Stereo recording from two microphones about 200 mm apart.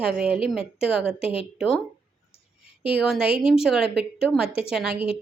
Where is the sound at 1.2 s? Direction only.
30° left (ahead or behind).